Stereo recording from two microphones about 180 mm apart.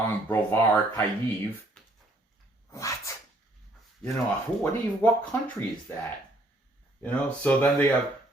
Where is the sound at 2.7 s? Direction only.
15° left (ahead or behind).